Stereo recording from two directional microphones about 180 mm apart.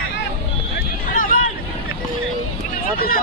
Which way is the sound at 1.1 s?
50° left (ahead or behind).